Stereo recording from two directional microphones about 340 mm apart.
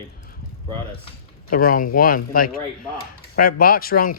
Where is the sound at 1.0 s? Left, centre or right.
Left.